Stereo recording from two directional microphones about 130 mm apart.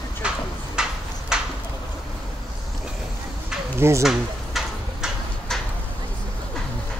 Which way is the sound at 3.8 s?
20° right (ahead or behind).